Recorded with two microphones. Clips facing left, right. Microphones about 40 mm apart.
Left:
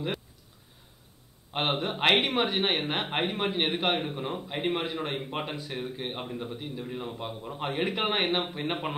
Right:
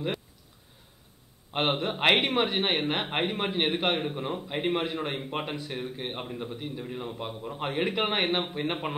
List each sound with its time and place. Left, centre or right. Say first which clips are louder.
1.5 s speech: right 1 dB; centre